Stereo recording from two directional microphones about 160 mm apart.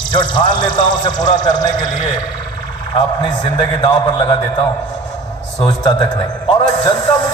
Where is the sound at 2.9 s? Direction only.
30° left (ahead or behind).